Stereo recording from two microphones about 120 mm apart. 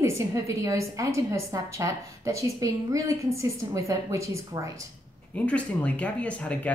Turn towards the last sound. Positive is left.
turn(degrees=10)  # may be behind; listen again after turning